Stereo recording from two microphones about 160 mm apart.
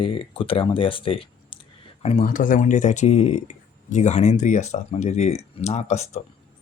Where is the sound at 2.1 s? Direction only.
55° left (ahead or behind).